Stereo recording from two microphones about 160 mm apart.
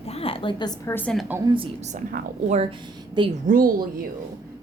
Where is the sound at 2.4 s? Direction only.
45° right (ahead or behind).